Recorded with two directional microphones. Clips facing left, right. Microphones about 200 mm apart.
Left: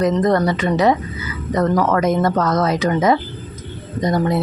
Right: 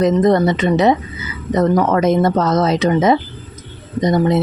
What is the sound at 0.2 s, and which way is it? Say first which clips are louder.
A woman's voice: right 3 dB; 20° right (ahead or behind).